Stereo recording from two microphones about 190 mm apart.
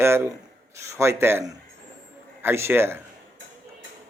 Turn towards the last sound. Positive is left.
turn(degrees=-10)  # may be behind; listen again after turning